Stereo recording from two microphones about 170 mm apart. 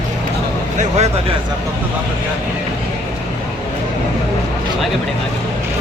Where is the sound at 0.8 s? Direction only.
40° right (ahead or behind).